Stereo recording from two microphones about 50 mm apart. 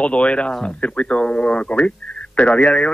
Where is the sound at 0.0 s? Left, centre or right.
Left.